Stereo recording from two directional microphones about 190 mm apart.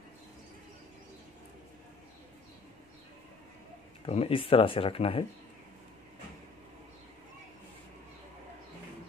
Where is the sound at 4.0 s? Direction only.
30° left (ahead or behind).